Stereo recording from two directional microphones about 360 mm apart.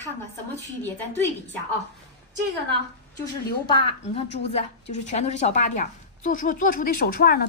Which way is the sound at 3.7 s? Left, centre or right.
Centre.